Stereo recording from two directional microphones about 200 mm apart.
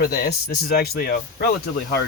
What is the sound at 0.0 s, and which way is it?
Speech, 50° left (ahead or behind).